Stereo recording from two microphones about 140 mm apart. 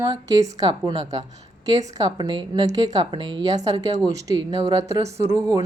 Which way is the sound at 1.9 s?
25° right (ahead or behind).